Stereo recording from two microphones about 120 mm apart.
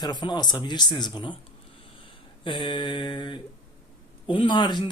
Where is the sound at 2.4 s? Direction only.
45° left (ahead or behind).